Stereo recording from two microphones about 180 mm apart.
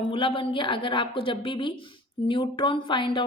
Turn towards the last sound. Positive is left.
turn(degrees=25)  # may be behind; listen again after turning